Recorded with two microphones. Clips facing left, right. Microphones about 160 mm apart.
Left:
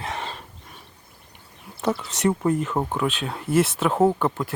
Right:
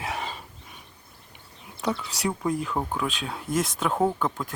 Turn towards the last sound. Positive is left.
turn(degrees=10)  # may be behind; listen again after turning